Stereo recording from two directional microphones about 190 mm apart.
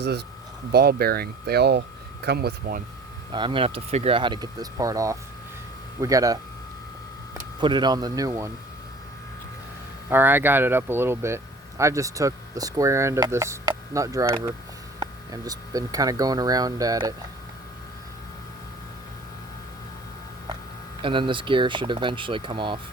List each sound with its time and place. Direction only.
0.0 s speech: 60° right (ahead or behind)
3.3 s speech: 25° right (ahead or behind)
7.6 s speech: 25° right (ahead or behind)
10.1 s speech: 10° right (ahead or behind)
21.0 s speech: 25° right (ahead or behind)